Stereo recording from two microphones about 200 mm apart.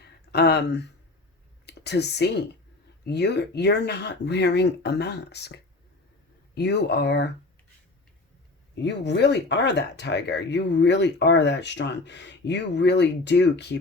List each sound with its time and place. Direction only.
0.0 s a sound: 55° left (ahead or behind)
1.6 s speech: 55° left (ahead or behind)
8.7 s speech: 60° left (ahead or behind)